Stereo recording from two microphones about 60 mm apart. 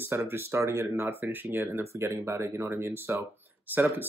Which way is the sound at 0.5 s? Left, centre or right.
Right.